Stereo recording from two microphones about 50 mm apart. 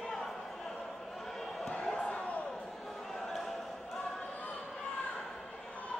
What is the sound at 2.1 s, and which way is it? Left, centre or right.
Slam, left.